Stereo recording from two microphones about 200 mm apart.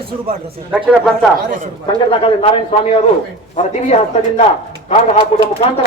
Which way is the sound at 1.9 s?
25° left (ahead or behind).